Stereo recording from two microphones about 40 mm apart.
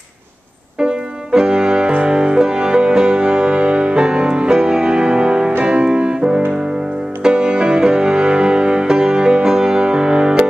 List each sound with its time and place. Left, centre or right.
0.7 s music: right